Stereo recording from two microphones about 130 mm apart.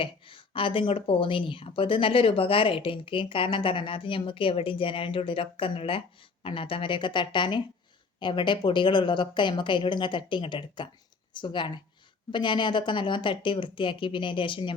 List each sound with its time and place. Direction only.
0.0 s a woman's voice: 45° left (ahead or behind)